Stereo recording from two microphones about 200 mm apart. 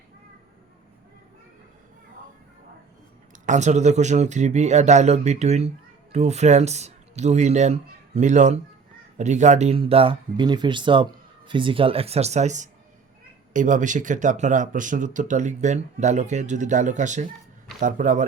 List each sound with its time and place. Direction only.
3.4 s speech: 35° right (ahead or behind)